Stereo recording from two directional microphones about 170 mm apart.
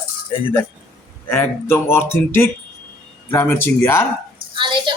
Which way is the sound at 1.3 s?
15° left (ahead or behind).